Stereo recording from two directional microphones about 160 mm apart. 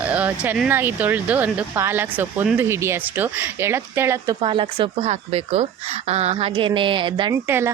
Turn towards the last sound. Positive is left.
turn(degrees=-15)  # may be behind; listen again after turning